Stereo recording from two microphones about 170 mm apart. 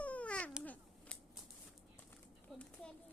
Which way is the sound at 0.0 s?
10° left (ahead or behind).